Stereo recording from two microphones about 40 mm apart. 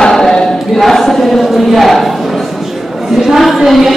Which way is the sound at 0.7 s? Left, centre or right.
Centre.